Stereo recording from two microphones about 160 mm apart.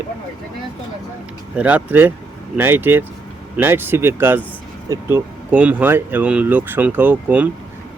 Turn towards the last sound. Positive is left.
turn(degrees=-10)  # may be behind; listen again after turning